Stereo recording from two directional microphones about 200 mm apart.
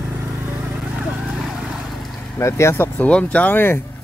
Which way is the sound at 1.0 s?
5° right (ahead or behind).